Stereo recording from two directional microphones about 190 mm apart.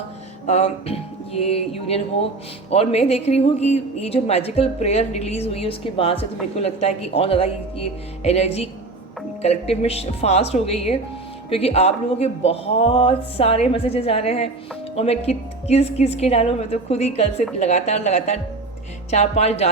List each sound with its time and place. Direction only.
0.4 s speech: 35° left (ahead or behind)